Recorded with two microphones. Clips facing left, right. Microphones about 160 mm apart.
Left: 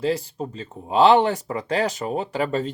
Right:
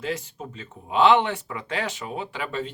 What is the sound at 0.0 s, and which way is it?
Speech, 35° left (ahead or behind).